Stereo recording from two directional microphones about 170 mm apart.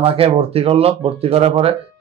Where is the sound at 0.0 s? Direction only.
35° right (ahead or behind).